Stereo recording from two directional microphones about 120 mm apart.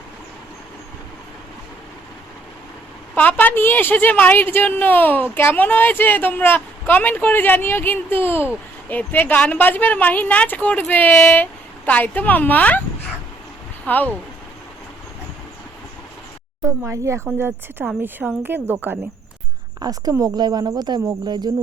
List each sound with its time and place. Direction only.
3.2 s a woman's voice: 15° left (ahead or behind)
13.8 s a woman's voice: 15° left (ahead or behind)
16.6 s speech: 25° right (ahead or behind)
19.8 s speech: 30° right (ahead or behind)